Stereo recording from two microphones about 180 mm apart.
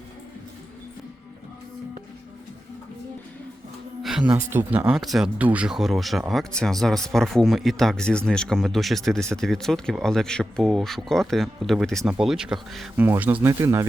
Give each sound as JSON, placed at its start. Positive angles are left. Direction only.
{"t": 4.0, "sound": "music", "side_deg": -5}
{"t": 4.4, "sound": "speech", "side_deg": -10}